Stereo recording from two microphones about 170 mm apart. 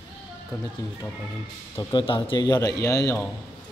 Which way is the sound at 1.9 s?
30° left (ahead or behind).